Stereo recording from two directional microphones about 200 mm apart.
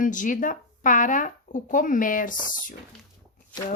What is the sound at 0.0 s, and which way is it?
Speech, 40° left (ahead or behind).